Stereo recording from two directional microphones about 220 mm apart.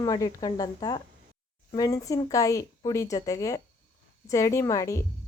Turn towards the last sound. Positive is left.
turn(degrees=15)  # may be behind; listen again after turning